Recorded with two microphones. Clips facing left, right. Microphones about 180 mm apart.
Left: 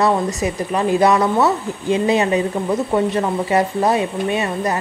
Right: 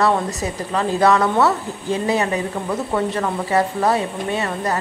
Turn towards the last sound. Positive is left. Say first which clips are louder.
# left 2 dB
turn(degrees=15)  # may be behind; listen again after turning